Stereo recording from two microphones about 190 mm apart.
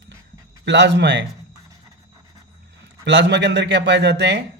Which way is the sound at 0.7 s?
65° right (ahead or behind).